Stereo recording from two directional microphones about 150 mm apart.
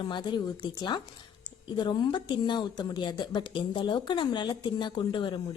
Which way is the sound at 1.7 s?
30° left (ahead or behind).